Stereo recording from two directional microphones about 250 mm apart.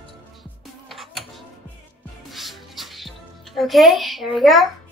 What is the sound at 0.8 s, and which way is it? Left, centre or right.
Music, centre.